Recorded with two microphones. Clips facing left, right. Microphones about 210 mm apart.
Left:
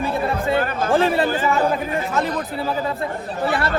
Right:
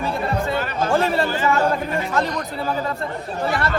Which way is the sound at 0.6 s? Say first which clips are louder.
Left 2 dB; 50° left (ahead or behind).